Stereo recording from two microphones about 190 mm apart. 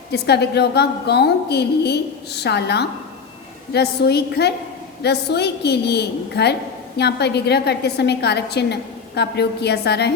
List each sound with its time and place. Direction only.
0.1 s a woman's voice: 60° left (ahead or behind)